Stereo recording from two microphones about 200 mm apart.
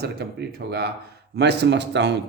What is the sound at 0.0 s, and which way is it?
Speech, 55° right (ahead or behind).